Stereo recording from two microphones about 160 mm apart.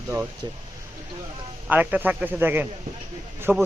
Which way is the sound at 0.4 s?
25° right (ahead or behind).